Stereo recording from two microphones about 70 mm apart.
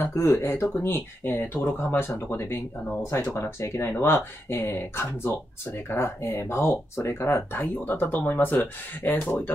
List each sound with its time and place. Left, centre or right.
0.0 s speech: left
3.1 s speech: left